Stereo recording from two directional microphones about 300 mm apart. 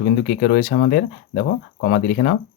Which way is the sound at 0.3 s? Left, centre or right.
Left.